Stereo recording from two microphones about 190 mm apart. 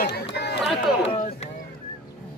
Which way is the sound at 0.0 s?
60° left (ahead or behind).